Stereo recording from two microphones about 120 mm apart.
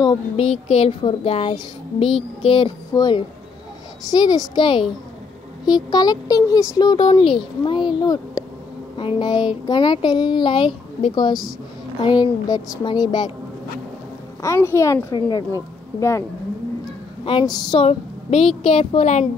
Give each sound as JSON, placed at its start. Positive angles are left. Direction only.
{"t": 0.4, "sound": "a sound", "side_deg": 60}
{"t": 1.5, "sound": "speech", "side_deg": 50}
{"t": 2.9, "sound": "a woman's voice", "side_deg": 35}
{"t": 14.4, "sound": "a woman's voice", "side_deg": 25}
{"t": 17.2, "sound": "speech", "side_deg": 45}
{"t": 17.8, "sound": "a woman's voice", "side_deg": 55}
{"t": 18.6, "sound": "a sound", "side_deg": 50}